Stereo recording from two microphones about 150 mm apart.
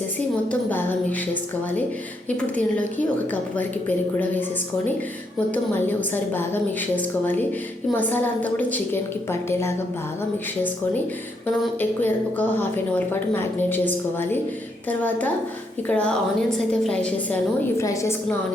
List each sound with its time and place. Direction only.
0.7 s a woman's voice: 15° left (ahead or behind)
3.6 s a woman's voice: 10° left (ahead or behind)
5.5 s a woman's voice: 10° left (ahead or behind)
11.8 s a woman's voice: 10° left (ahead or behind)
17.7 s a woman's voice: 20° left (ahead or behind)